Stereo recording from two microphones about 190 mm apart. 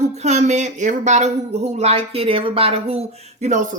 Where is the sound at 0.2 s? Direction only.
35° right (ahead or behind).